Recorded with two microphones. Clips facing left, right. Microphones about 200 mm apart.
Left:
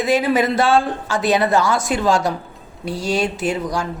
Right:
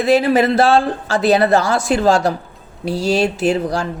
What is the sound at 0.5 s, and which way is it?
Speech, 35° right (ahead or behind).